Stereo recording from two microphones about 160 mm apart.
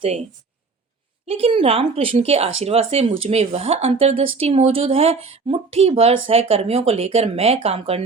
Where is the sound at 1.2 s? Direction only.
35° right (ahead or behind).